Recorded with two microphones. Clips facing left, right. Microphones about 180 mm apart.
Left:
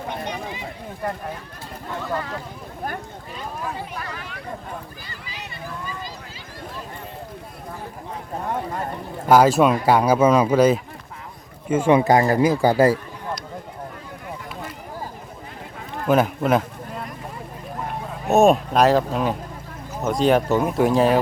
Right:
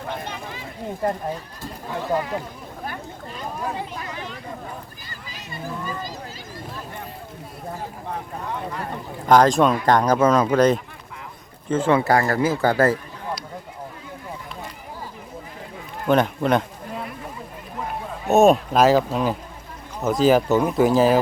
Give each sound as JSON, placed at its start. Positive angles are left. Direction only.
{"t": 2.1, "sound": "speech", "side_deg": -15}
{"t": 8.4, "sound": "speech", "side_deg": 50}
{"t": 9.3, "sound": "speech", "side_deg": 5}
{"t": 16.0, "sound": "speech", "side_deg": 5}
{"t": 18.3, "sound": "speech", "side_deg": 0}